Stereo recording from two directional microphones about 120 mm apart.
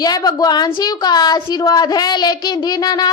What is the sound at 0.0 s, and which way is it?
A woman's voice, 35° left (ahead or behind).